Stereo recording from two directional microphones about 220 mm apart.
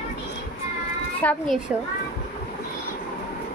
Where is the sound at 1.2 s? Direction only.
5° left (ahead or behind).